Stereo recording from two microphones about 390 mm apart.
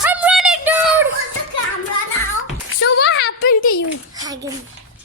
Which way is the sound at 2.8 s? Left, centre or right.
Left.